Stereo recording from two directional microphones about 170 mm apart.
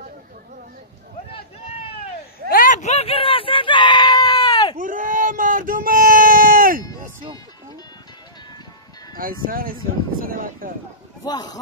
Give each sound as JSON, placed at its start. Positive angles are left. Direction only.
{"t": 1.7, "sound": "a sound", "side_deg": 35}
{"t": 2.5, "sound": "screaming", "side_deg": 50}
{"t": 4.7, "sound": "a sound", "side_deg": -50}
{"t": 9.1, "sound": "music", "side_deg": -55}
{"t": 9.5, "sound": "speech", "side_deg": -55}
{"t": 11.2, "sound": "speech", "side_deg": 25}